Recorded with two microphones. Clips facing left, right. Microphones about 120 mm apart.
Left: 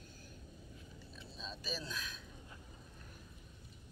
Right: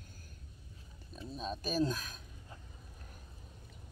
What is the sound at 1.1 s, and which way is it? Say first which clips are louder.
Speech: right 10 dB; 50° right (ahead or behind).